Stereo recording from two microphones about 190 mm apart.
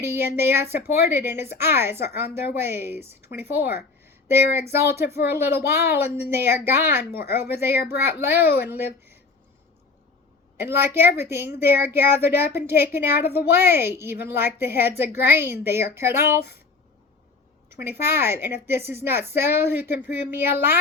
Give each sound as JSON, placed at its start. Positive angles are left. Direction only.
{"t": 0.0, "sound": "speech", "side_deg": -10}
{"t": 10.7, "sound": "speech", "side_deg": -10}
{"t": 13.1, "sound": "a woman's voice", "side_deg": 60}
{"t": 13.5, "sound": "speech", "side_deg": -10}
{"t": 17.7, "sound": "a sound", "side_deg": -15}
{"t": 18.0, "sound": "speech", "side_deg": -10}